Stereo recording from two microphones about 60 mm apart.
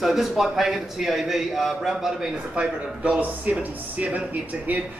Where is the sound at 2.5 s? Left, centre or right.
Centre.